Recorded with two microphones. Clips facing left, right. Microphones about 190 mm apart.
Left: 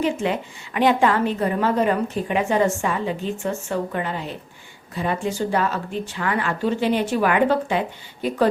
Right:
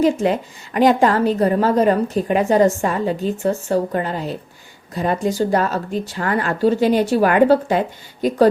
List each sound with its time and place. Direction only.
0.0 s a woman's voice: 40° right (ahead or behind)